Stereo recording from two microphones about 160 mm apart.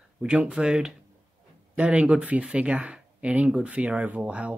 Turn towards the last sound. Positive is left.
turn(degrees=-10)  # may be behind; listen again after turning